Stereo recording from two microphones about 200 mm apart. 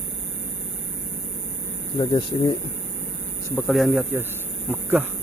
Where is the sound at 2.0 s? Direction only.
20° left (ahead or behind).